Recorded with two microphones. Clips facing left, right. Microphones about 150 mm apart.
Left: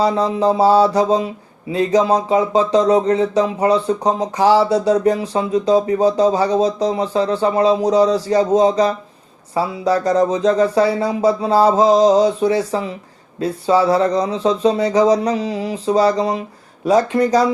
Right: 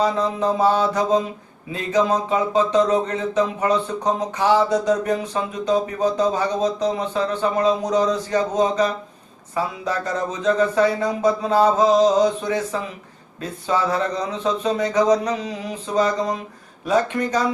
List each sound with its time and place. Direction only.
0.0 s speech: 35° left (ahead or behind)